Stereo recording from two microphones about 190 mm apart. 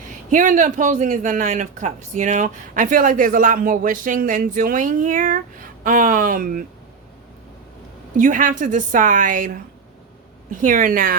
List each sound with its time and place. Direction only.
0.3 s speech: 45° right (ahead or behind)
8.1 s speech: 45° right (ahead or behind)